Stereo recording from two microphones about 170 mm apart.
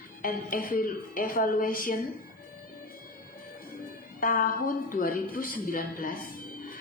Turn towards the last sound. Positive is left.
turn(degrees=55)  # may be behind; listen again after turning